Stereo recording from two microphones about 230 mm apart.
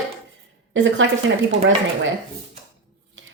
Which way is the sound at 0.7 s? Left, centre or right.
Right.